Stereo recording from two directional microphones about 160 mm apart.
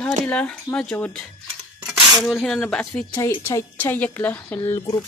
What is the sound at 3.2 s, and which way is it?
Speech, 15° left (ahead or behind).